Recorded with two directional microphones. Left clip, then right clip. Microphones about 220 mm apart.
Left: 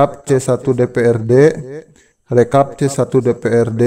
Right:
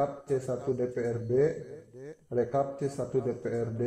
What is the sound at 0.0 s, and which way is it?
Speech, 55° left (ahead or behind).